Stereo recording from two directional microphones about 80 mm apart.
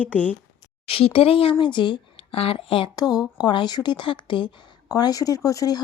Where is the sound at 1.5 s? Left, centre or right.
Left.